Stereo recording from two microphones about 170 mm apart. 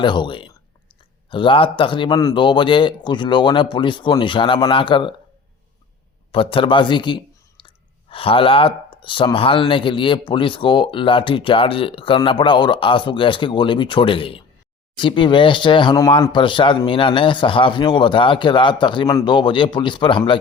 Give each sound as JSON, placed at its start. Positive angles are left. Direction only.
{"t": 0.0, "sound": "speech", "side_deg": 30}
{"t": 6.3, "sound": "speech", "side_deg": 30}